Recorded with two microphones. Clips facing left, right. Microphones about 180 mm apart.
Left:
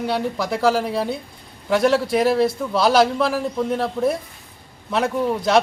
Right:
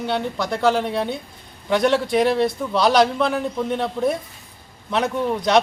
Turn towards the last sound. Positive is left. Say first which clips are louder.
# even
turn(degrees=5)  # may be behind; listen again after turning